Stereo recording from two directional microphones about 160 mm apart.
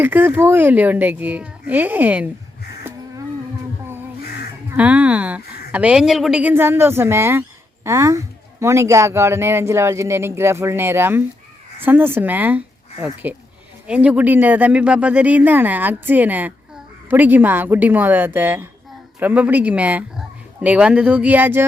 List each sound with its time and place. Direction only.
0.0 s speech: 10° right (ahead or behind)
4.7 s speech: 10° right (ahead or behind)